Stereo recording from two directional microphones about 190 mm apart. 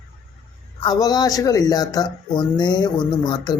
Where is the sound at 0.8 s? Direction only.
20° left (ahead or behind).